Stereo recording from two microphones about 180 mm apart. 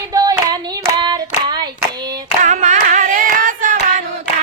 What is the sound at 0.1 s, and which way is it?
Hands, 20° right (ahead or behind).